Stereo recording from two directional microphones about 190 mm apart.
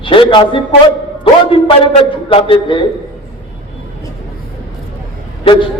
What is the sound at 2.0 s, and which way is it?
Speech, 30° left (ahead or behind).